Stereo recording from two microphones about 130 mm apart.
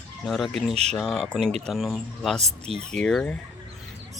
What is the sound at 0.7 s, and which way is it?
Speech, 55° right (ahead or behind).